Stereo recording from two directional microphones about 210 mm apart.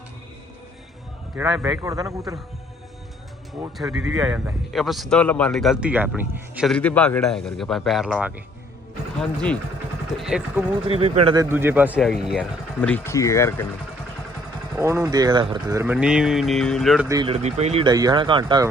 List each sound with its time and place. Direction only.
1.4 s speech: 5° right (ahead or behind)
3.6 s a man's voice: 5° right (ahead or behind)
10.2 s a man's voice: 5° right (ahead or behind)
10.8 s speech: 25° right (ahead or behind)
11.3 s a man's voice: 10° right (ahead or behind); by 13.7 s 15° left (ahead or behind)
14.8 s speech: 15° right (ahead or behind)
17.1 s speech: 20° right (ahead or behind)
17.9 s speech: 20° right (ahead or behind)